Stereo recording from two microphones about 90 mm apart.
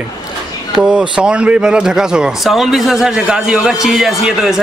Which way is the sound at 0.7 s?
10° right (ahead or behind).